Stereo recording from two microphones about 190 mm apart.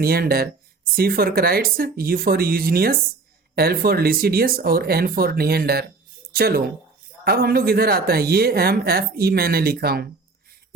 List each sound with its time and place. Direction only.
0.0 s speech: 55° right (ahead or behind)